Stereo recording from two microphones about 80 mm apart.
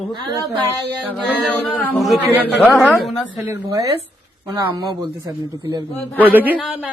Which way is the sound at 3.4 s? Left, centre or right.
Right.